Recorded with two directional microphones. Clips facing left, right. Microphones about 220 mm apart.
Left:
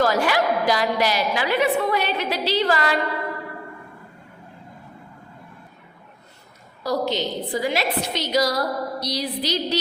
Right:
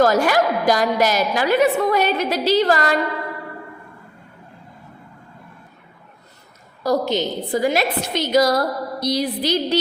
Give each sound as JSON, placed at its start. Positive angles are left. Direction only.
{"t": 0.0, "sound": "a woman's voice", "side_deg": -45}
{"t": 6.8, "sound": "a woman's voice", "side_deg": -45}